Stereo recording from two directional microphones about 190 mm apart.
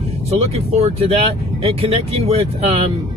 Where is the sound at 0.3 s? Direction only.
35° right (ahead or behind).